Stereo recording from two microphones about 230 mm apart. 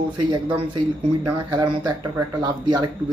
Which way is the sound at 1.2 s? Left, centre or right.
Centre.